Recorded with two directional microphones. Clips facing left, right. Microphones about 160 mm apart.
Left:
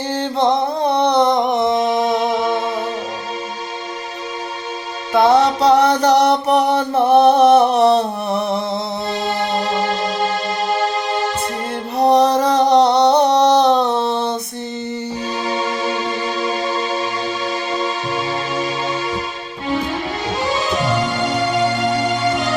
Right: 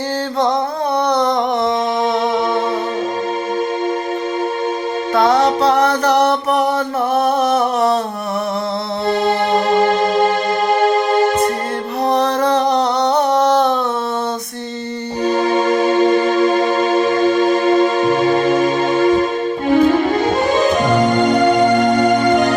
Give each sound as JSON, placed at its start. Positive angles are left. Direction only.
{"t": 1.0, "sound": "a sound", "side_deg": 25}
{"t": 5.1, "sound": "music", "side_deg": 20}
{"t": 9.0, "sound": "music", "side_deg": -50}
{"t": 12.0, "sound": "music", "side_deg": 15}
{"t": 13.2, "sound": "a sound", "side_deg": 35}
{"t": 15.3, "sound": "music", "side_deg": -50}